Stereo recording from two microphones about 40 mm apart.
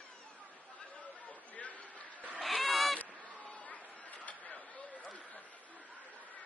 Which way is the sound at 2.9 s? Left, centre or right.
Left.